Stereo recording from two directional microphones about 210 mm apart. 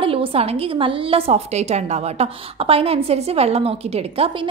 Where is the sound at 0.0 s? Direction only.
25° right (ahead or behind).